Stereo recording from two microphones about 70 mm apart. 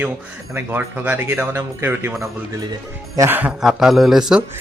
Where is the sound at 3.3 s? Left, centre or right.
Right.